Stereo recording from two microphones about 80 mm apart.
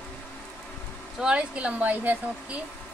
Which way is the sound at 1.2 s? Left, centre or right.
Centre.